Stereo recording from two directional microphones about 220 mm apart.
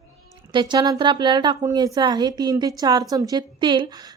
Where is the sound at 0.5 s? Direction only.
20° right (ahead or behind).